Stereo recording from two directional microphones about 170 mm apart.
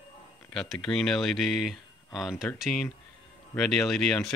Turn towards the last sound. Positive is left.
turn(degrees=5)  # may be behind; listen again after turning